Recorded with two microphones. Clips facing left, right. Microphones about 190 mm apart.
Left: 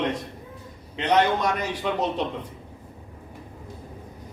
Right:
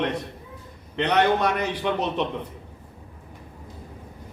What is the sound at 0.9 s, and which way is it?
A man's voice, 65° right (ahead or behind).